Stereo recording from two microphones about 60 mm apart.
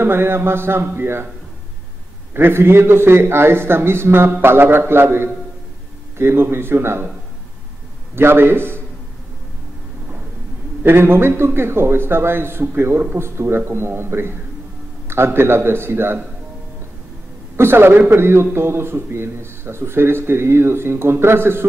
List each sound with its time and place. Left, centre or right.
0.0 s a man's voice: right
2.3 s a man's voice: right
8.2 s a man's voice: right
10.8 s a man's voice: right
17.6 s a man's voice: right